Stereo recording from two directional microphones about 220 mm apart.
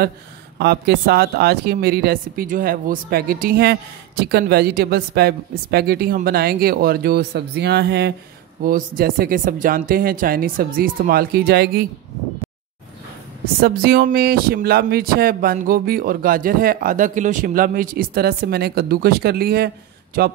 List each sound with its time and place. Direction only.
0.6 s speech: 45° right (ahead or behind)
13.6 s speech: 45° right (ahead or behind)